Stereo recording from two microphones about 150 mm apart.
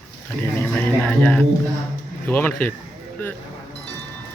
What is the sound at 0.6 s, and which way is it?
Speech, 10° left (ahead or behind).